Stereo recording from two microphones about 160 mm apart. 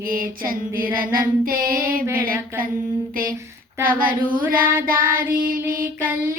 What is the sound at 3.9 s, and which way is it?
Child singing, 60° right (ahead or behind).